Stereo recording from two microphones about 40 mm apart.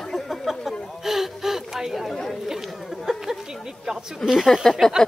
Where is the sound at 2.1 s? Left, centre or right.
Centre.